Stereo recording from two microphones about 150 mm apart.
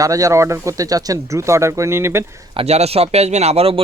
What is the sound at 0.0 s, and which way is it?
Speech, 20° right (ahead or behind).